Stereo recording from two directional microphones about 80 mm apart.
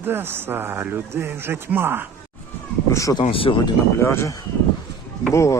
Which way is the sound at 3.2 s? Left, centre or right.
Left.